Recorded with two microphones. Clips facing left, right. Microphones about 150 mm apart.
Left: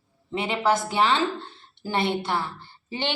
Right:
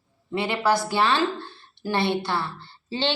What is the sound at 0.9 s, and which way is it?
A woman's voice, 20° left (ahead or behind).